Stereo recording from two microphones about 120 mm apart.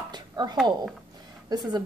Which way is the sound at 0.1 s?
35° right (ahead or behind).